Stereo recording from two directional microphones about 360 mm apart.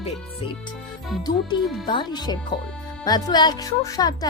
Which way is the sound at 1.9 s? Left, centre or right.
Centre.